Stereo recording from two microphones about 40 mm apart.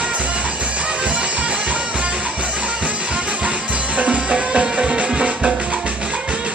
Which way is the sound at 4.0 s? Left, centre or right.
Right.